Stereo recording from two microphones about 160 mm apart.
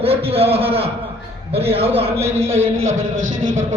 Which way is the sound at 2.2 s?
15° right (ahead or behind).